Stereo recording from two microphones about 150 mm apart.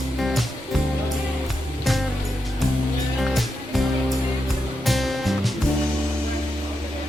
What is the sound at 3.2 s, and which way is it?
Music, centre (ahead or behind).